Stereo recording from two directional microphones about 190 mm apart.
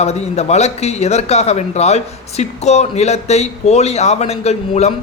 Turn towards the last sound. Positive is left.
turn(degrees=35)  # may be behind; listen again after turning